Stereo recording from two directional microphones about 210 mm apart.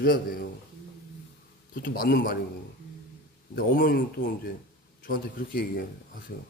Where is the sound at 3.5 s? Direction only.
45° left (ahead or behind).